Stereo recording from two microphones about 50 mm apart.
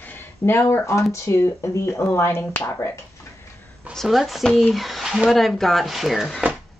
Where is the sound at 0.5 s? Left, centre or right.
Left.